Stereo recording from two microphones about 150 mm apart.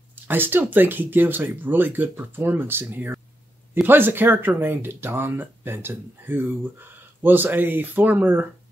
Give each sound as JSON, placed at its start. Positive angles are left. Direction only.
{"t": 0.3, "sound": "speech", "side_deg": -15}